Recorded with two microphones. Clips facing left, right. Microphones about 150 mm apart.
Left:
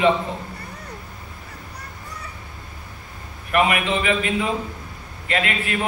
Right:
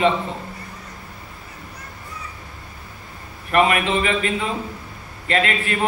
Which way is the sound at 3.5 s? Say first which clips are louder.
Right 2 dB; 40° right (ahead or behind).